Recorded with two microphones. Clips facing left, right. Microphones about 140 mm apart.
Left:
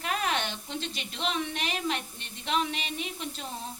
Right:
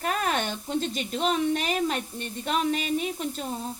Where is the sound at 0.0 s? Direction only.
45° right (ahead or behind).